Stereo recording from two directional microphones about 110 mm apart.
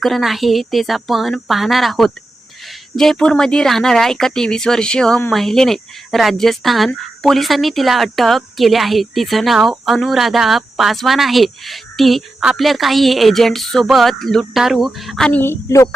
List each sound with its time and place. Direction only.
0.0 s speech: centre (ahead or behind)
15.3 s a woman's voice: 20° left (ahead or behind)